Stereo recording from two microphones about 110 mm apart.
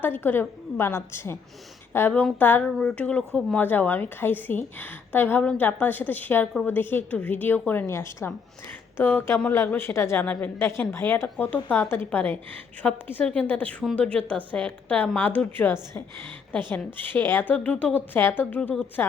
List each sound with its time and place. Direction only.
0.0 s a woman's voice: 20° left (ahead or behind)